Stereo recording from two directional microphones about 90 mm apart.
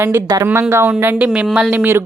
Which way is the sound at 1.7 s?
25° right (ahead or behind).